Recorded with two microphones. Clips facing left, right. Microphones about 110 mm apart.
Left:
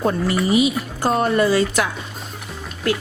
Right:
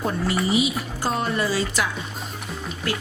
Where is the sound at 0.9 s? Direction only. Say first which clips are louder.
Left 7 dB; 50° left (ahead or behind).